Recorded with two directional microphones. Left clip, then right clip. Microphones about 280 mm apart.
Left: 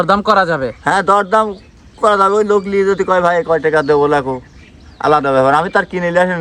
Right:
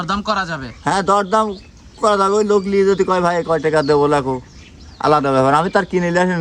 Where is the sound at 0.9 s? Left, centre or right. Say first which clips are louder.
Left 3 dB; centre.